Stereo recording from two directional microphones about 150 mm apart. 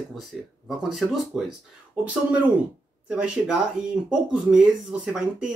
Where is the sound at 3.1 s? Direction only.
5° right (ahead or behind).